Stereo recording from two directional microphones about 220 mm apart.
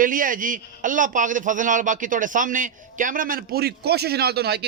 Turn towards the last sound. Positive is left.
turn(degrees=-45)  # may be behind; listen again after turning